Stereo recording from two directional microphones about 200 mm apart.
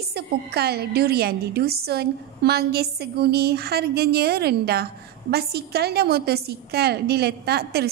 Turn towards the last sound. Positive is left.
turn(degrees=-55)  # may be behind; listen again after turning